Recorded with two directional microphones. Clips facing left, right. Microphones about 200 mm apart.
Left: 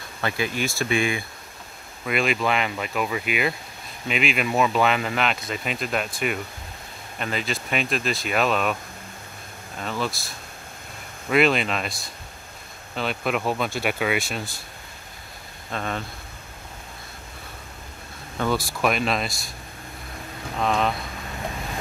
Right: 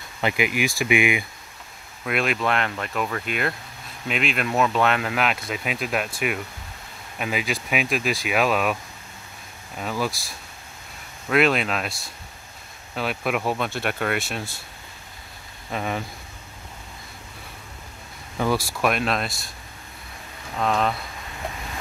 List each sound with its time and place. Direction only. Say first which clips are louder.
0.2 s speech: right 3 dB; 15° right (ahead or behind)
2.0 s speech: even; centre (ahead or behind)
9.8 s speech: right 1 dB; 10° right (ahead or behind)
11.2 s speech: even; centre (ahead or behind)
12.9 s speech: even; 5° right (ahead or behind)
15.7 s speech: right 2 dB; 10° right (ahead or behind)
18.4 s speech: right 1 dB; 5° right (ahead or behind)
20.6 s speech: even; centre (ahead or behind)